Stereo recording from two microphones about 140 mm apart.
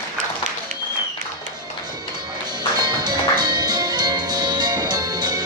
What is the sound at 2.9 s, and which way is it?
Music, 30° right (ahead or behind).